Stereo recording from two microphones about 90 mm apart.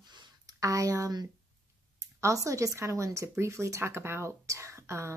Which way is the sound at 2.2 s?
35° right (ahead or behind).